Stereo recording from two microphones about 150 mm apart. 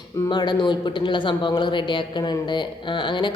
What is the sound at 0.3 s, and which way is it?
A man's voice, 30° left (ahead or behind).